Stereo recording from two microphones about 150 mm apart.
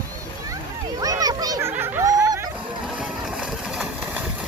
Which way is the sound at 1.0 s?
25° right (ahead or behind).